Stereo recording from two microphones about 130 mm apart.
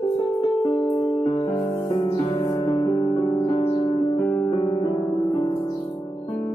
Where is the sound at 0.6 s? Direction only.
20° left (ahead or behind).